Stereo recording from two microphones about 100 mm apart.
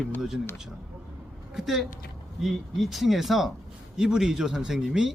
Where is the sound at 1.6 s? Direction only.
5° right (ahead or behind).